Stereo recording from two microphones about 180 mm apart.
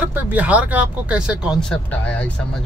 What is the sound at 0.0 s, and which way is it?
Speech, 10° right (ahead or behind).